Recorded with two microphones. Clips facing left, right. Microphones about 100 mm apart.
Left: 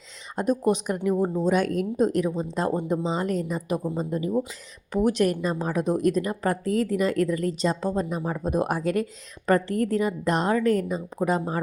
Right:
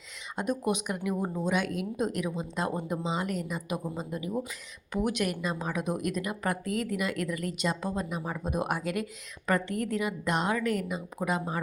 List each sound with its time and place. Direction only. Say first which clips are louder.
0.3 s speech: left 6 dB; 35° left (ahead or behind)
1.1 s speech: left 8 dB; 25° left (ahead or behind)
1.5 s speech: left 7 dB; 40° left (ahead or behind)